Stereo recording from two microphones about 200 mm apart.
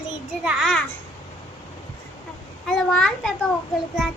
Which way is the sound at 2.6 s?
Centre (ahead or behind).